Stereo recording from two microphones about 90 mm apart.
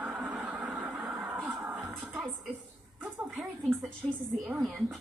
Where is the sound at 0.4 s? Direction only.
15° right (ahead or behind).